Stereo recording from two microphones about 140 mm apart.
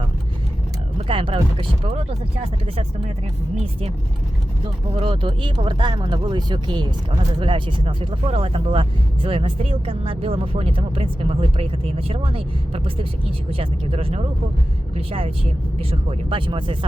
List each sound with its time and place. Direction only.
0.9 s speech: 40° right (ahead or behind)
4.6 s speech: 40° right (ahead or behind)